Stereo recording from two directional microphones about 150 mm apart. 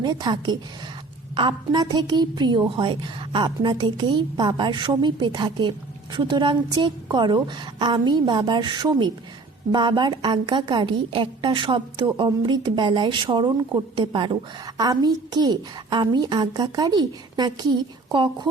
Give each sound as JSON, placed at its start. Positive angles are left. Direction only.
{"t": 0.0, "sound": "a woman's voice", "side_deg": -30}